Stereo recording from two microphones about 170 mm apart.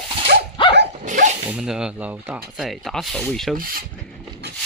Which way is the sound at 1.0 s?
45° right (ahead or behind).